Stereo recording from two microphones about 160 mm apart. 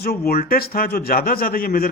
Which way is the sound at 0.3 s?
70° left (ahead or behind).